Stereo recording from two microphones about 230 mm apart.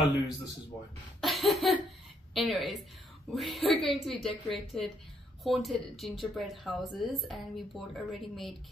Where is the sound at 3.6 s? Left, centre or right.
Centre.